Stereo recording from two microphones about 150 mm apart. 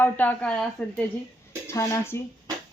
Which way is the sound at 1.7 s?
15° left (ahead or behind).